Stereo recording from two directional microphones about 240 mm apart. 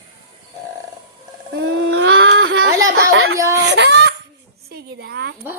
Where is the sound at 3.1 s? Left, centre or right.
Right.